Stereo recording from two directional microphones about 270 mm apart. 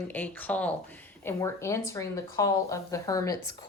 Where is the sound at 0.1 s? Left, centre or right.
Centre.